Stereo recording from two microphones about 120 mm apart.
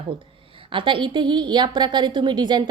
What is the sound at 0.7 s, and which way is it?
A woman's voice, 45° right (ahead or behind).